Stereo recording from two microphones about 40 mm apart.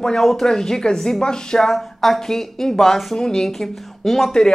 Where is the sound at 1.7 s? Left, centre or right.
Centre.